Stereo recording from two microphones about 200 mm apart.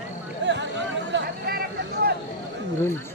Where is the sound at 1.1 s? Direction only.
50° right (ahead or behind).